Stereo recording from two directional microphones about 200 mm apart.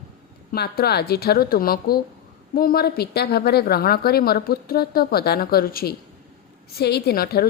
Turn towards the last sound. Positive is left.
turn(degrees=50)  # may be behind; listen again after turning